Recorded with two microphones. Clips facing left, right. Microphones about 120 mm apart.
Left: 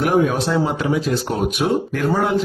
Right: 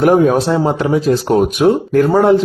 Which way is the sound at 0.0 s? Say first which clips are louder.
Right 7 dB; 40° right (ahead or behind).